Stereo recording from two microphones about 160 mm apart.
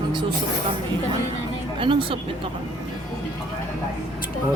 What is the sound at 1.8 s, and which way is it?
Speech, 35° right (ahead or behind).